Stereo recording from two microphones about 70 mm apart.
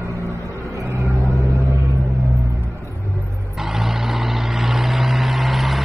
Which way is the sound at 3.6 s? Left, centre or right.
Centre.